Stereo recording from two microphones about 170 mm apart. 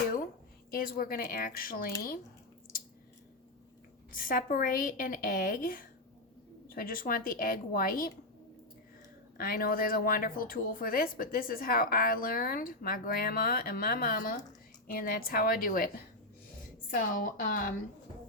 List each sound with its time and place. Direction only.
0.7 s speech: 55° left (ahead or behind)
4.1 s speech: 55° left (ahead or behind)
9.4 s speech: 60° left (ahead or behind)
16.9 s speech: 50° left (ahead or behind)